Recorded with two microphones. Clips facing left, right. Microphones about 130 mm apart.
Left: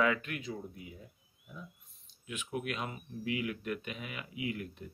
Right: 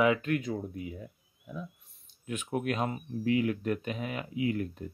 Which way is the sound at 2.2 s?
45° right (ahead or behind).